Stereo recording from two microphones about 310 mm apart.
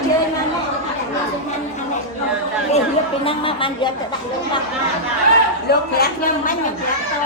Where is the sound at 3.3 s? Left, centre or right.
Centre.